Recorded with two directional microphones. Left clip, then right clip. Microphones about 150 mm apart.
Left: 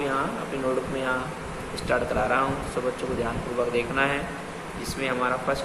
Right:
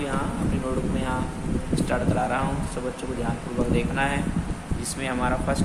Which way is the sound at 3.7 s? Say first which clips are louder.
Even; 25° right (ahead or behind).